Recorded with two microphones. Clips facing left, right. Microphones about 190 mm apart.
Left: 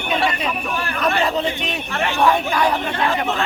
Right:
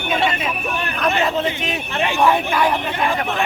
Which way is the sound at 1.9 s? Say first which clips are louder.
Right 1 dB; 15° right (ahead or behind).